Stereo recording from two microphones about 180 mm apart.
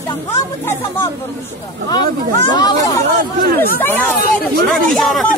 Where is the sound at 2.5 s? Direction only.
25° left (ahead or behind).